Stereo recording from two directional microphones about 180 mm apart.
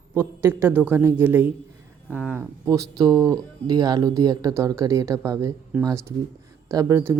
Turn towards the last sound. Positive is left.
turn(degrees=-15)  # may be behind; listen again after turning